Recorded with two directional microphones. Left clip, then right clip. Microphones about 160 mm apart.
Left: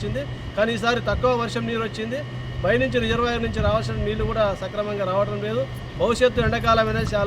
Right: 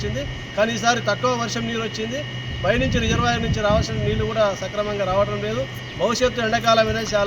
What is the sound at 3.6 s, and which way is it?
Speech, 10° left (ahead or behind).